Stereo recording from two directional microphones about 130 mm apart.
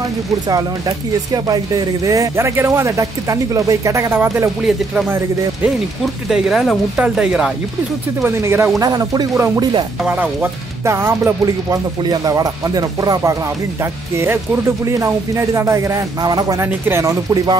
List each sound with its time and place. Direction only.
0.5 s speech: 30° right (ahead or behind)
6.2 s speech: centre (ahead or behind)
8.4 s speech: 20° right (ahead or behind)
10.0 s speech: 10° right (ahead or behind); by 16.6 s 30° right (ahead or behind)
16.6 s speech: 15° right (ahead or behind)